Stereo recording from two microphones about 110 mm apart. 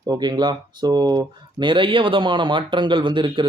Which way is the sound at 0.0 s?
40° right (ahead or behind).